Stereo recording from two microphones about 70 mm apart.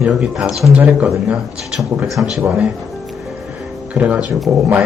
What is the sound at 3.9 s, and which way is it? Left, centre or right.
Speech, centre.